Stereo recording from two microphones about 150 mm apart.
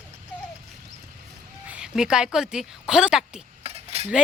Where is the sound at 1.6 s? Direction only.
5° right (ahead or behind).